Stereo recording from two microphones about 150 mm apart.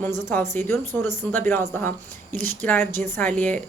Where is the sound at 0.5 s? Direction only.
15° left (ahead or behind).